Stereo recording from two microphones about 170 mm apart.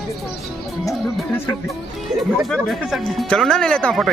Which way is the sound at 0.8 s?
15° left (ahead or behind).